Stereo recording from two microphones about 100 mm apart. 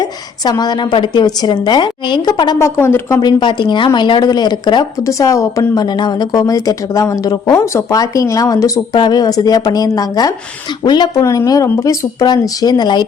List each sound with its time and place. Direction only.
0.0 s a woman's voice: 45° left (ahead or behind)
2.6 s speech: 25° left (ahead or behind)
3.2 s a woman's voice: 45° left (ahead or behind)
5.0 s a woman's voice: 35° left (ahead or behind)
7.5 s a woman's voice: 30° left (ahead or behind); by 11.1 s 45° left (ahead or behind)
11.1 s a woman's voice: 35° left (ahead or behind)
12.2 s a woman's voice: 45° left (ahead or behind)